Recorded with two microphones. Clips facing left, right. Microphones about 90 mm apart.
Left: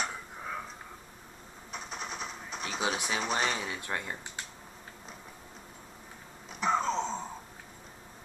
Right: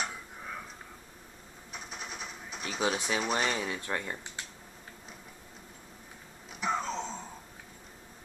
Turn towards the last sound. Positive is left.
turn(degrees=30)  # may be behind; listen again after turning